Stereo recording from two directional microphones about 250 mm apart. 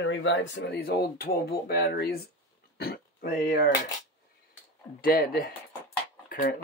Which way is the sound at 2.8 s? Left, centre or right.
Left.